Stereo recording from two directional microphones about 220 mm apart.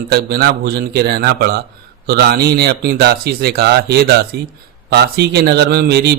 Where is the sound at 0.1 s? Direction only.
45° right (ahead or behind).